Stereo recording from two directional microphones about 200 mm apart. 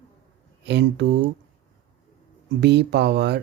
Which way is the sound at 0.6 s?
60° right (ahead or behind).